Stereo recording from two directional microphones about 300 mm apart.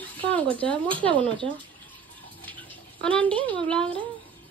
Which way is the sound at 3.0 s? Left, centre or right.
Centre.